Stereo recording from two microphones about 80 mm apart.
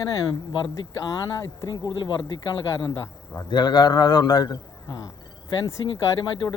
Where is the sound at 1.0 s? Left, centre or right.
Left.